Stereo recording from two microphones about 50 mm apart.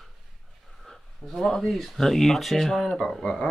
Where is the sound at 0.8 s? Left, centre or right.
Centre.